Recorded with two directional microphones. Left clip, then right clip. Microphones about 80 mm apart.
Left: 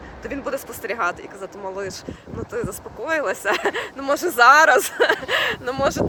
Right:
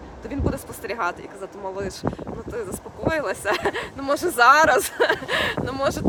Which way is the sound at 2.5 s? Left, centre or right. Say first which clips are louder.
Left 4 dB; centre.